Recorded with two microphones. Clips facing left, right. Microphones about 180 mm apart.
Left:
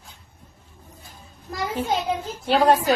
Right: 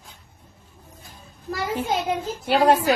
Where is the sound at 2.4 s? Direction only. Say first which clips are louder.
Even; 15° right (ahead or behind).